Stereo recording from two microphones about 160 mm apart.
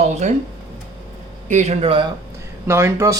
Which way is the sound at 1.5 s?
45° right (ahead or behind).